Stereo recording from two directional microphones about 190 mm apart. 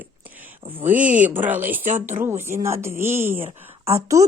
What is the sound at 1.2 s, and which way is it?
Speech, 10° right (ahead or behind).